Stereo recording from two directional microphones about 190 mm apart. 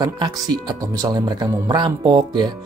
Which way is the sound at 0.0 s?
20° right (ahead or behind).